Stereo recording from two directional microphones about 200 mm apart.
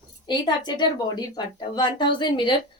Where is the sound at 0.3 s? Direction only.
20° left (ahead or behind).